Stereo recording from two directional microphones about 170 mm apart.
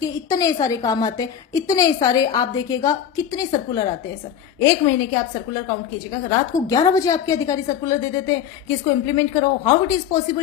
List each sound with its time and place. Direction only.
0.0 s a woman's voice: 20° left (ahead or behind)
6.7 s a woman's voice: 20° left (ahead or behind)